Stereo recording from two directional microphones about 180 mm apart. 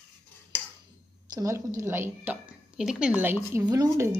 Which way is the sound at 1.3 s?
20° right (ahead or behind).